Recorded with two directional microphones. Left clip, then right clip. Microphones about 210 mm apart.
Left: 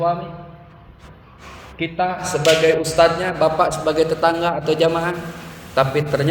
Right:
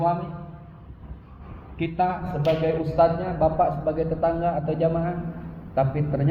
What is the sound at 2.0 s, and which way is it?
A man's voice, 25° left (ahead or behind).